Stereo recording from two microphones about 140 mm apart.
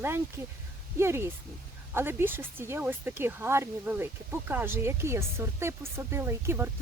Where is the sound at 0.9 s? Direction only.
20° right (ahead or behind).